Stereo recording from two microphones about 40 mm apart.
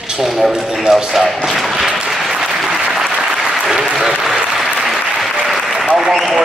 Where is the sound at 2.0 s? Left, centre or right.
Centre.